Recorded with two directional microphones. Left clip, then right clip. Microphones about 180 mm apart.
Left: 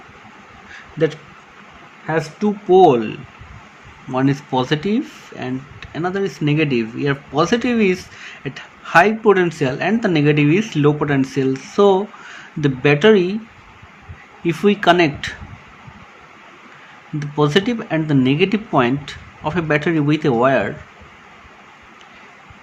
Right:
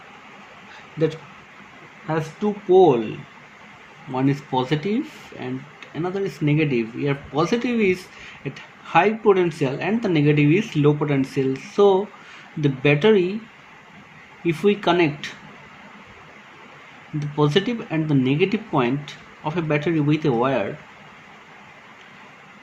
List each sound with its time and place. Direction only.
0.9 s speech: 25° left (ahead or behind)
2.0 s speech: 35° left (ahead or behind)
4.1 s speech: 30° left (ahead or behind)
14.4 s speech: 30° left (ahead or behind)
17.2 s speech: 25° left (ahead or behind)